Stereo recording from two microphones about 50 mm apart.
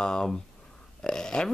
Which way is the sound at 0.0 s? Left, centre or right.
Centre.